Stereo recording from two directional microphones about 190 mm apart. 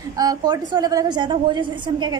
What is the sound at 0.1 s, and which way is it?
A woman's voice, 20° right (ahead or behind).